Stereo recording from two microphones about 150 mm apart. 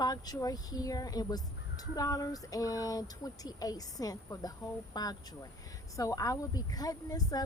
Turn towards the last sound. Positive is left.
turn(degrees=25)  # may be behind; listen again after turning